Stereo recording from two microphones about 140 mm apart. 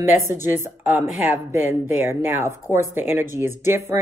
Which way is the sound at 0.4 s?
15° right (ahead or behind).